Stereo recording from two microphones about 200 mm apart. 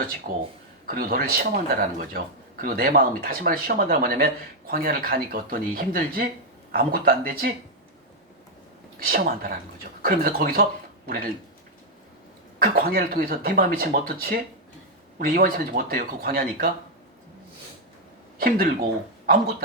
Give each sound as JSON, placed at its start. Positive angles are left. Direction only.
{"t": 0.3, "sound": "speech", "side_deg": -45}
{"t": 9.0, "sound": "speech", "side_deg": -45}
{"t": 12.5, "sound": "speech", "side_deg": -45}
{"t": 18.3, "sound": "speech", "side_deg": -45}